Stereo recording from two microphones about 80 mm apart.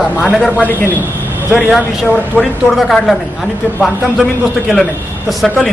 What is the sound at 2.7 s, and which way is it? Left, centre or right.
A man's voice, centre.